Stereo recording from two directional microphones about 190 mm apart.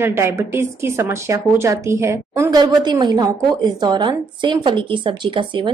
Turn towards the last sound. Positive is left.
turn(degrees=-25)  # may be behind; listen again after turning